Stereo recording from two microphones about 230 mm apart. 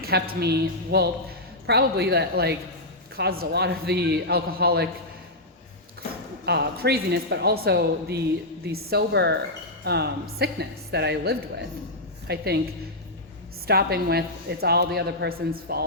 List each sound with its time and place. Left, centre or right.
0.0 s speech: right
6.4 s speech: right
13.7 s speech: right